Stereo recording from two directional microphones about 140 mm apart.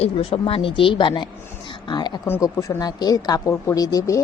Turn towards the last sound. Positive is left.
turn(degrees=25)  # may be behind; listen again after turning